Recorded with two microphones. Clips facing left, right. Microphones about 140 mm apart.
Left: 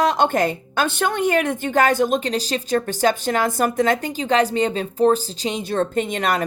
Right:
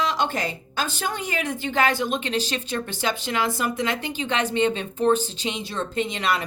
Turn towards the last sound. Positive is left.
turn(degrees=50)  # may be behind; listen again after turning